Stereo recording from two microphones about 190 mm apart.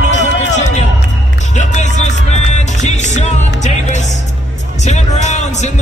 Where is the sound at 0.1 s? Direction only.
40° left (ahead or behind).